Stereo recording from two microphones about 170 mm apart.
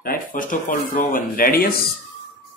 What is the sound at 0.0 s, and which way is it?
Speech, 55° left (ahead or behind).